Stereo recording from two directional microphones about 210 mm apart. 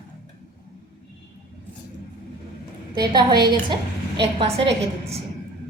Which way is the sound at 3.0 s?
20° right (ahead or behind).